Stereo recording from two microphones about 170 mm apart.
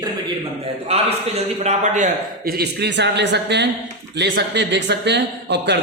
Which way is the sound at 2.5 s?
75° right (ahead or behind).